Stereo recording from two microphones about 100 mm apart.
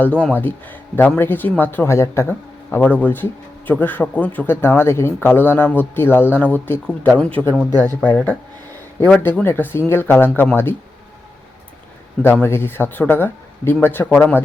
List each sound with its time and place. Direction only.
0.0 s speech: 10° left (ahead or behind); by 2.2 s 30° left (ahead or behind)
2.7 s speech: 20° left (ahead or behind)
12.2 s speech: 20° left (ahead or behind)